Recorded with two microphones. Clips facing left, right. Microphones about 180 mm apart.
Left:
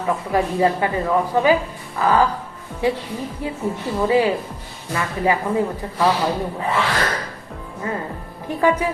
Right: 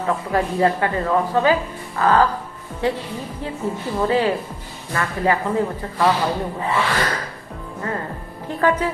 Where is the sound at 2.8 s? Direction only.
10° left (ahead or behind).